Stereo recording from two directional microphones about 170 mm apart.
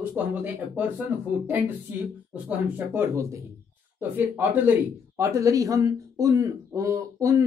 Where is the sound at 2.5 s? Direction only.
10° right (ahead or behind).